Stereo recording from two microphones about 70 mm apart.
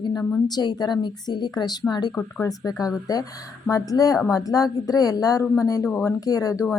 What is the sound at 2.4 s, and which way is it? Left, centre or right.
Speech, left.